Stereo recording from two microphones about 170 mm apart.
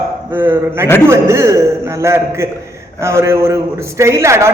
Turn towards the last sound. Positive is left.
turn(degrees=-15)  # may be behind; listen again after turning